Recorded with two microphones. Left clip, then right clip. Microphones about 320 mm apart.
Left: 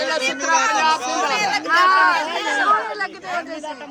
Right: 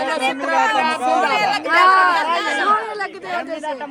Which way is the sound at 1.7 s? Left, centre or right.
Centre.